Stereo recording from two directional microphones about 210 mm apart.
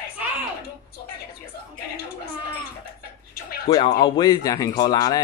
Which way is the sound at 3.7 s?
25° left (ahead or behind).